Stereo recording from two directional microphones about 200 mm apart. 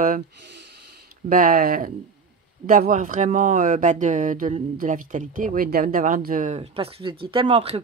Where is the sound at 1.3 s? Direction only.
45° right (ahead or behind).